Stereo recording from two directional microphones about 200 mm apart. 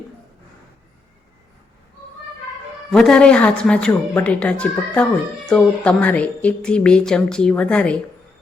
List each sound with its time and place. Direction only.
2.9 s a woman's voice: 5° left (ahead or behind)